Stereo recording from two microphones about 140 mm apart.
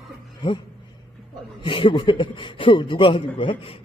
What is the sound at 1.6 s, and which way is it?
A man's voice, 35° left (ahead or behind).